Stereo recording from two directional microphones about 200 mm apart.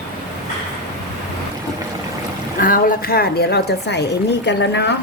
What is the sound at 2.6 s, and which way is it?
A woman's voice, 45° left (ahead or behind).